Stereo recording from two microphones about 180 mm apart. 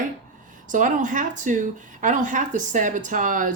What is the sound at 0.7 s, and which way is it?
A woman's voice, 45° right (ahead or behind).